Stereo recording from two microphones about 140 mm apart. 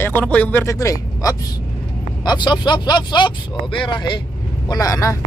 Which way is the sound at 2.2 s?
30° left (ahead or behind).